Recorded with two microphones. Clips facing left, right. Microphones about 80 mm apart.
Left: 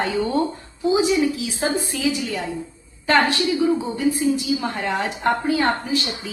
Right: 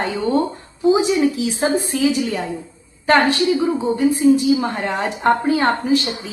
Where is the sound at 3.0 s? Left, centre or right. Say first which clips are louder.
Right 3 dB; right.